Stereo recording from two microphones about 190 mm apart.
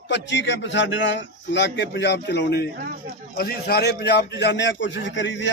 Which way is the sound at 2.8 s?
50° right (ahead or behind).